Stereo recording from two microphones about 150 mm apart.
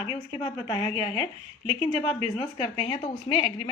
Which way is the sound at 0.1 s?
25° left (ahead or behind).